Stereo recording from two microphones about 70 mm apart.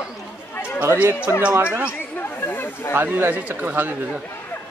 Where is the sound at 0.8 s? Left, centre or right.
Right.